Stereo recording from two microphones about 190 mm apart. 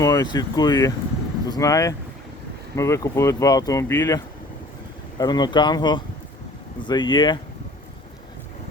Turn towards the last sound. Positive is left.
turn(degrees=25)  # may be behind; listen again after turning